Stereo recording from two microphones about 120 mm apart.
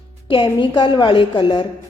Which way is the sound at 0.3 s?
40° left (ahead or behind).